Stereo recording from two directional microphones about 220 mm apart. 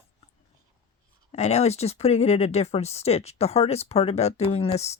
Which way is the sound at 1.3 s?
30° left (ahead or behind).